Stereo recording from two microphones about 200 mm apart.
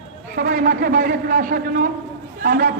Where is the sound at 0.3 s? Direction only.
45° right (ahead or behind).